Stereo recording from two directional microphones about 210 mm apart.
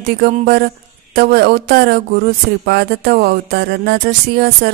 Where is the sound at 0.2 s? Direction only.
45° right (ahead or behind).